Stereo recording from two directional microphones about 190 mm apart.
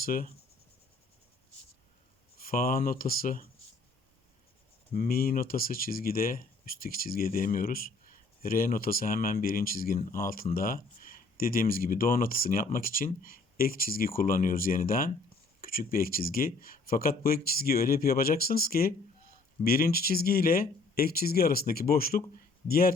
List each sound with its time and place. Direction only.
0.0 s speech: 50° left (ahead or behind)
2.4 s speech: 50° left (ahead or behind)
4.9 s speech: 50° left (ahead or behind)